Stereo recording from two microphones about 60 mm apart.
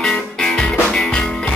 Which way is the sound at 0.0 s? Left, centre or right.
Centre.